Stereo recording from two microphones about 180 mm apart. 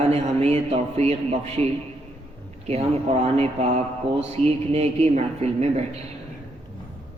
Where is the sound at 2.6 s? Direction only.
35° right (ahead or behind).